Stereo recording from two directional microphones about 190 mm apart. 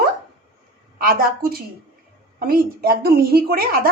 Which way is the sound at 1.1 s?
50° right (ahead or behind).